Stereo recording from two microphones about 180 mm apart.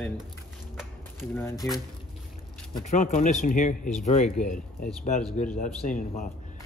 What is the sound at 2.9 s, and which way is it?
Speech, 45° left (ahead or behind).